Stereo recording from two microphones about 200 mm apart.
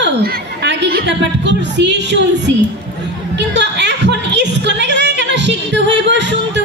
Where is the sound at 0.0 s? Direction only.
55° right (ahead or behind).